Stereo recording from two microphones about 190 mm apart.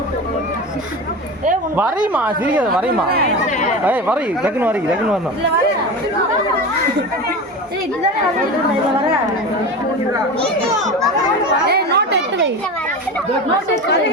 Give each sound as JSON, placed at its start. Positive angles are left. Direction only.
{"t": 2.1, "sound": "speech", "side_deg": -10}
{"t": 3.2, "sound": "speech", "side_deg": 40}
{"t": 3.8, "sound": "speech", "side_deg": -10}
{"t": 11.7, "sound": "a woman's voice", "side_deg": -60}